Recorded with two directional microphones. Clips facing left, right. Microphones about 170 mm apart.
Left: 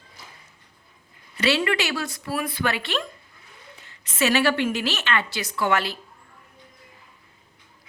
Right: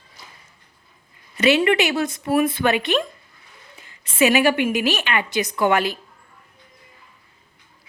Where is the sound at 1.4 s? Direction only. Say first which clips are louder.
Right 6 dB; 20° right (ahead or behind).